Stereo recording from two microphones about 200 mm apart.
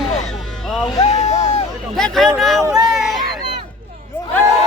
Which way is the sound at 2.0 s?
Centre (ahead or behind).